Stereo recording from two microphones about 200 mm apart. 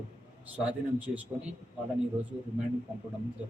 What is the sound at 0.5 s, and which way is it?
Speech, 5° right (ahead or behind).